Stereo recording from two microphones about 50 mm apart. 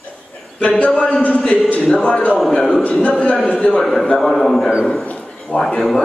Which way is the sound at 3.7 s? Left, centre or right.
Centre.